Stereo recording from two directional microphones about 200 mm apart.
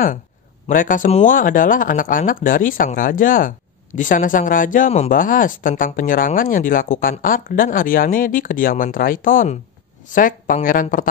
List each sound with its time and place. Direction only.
0.7 s speech: 40° left (ahead or behind)